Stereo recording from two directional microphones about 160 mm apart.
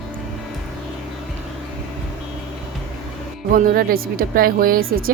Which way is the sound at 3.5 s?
65° right (ahead or behind).